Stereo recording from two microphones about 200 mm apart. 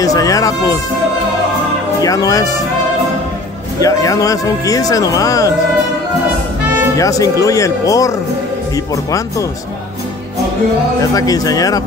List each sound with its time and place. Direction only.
0.0 s speech: 15° left (ahead or behind)
2.0 s speech: 15° left (ahead or behind)
3.8 s speech: 15° left (ahead or behind)
7.0 s speech: 15° left (ahead or behind)
11.0 s speech: 15° left (ahead or behind)